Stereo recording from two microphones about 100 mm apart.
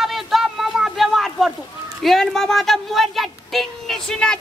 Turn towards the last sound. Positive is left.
turn(degrees=5)  # may be behind; listen again after turning